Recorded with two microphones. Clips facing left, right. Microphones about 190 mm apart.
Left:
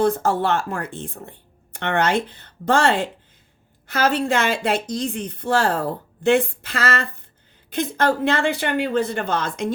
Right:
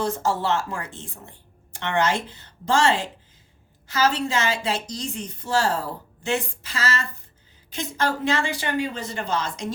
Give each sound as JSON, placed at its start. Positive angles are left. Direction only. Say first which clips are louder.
{"t": 0.0, "sound": "a woman's voice", "louder": "left 5 dB", "side_deg": 55}